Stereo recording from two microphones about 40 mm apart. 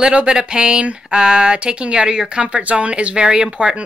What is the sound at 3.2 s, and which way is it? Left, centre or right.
Speech, centre.